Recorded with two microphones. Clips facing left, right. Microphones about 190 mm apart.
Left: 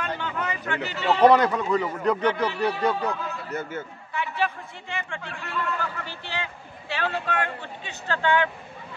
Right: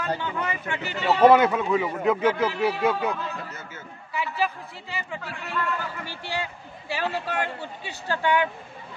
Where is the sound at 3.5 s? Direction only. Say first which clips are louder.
Left 10 dB; 55° left (ahead or behind).